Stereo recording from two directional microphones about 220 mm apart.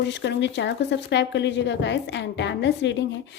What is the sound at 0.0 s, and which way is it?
Speech, 55° left (ahead or behind).